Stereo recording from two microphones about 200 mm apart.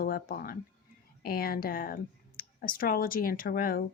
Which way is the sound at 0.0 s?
50° left (ahead or behind).